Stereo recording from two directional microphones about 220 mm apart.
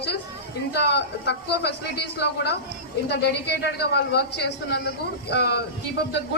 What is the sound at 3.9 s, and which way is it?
A man's voice, 45° left (ahead or behind).